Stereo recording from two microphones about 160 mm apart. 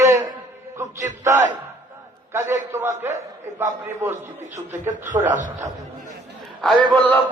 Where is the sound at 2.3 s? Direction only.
15° right (ahead or behind).